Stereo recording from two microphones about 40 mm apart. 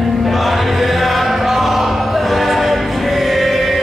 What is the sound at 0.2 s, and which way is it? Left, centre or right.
Music, centre.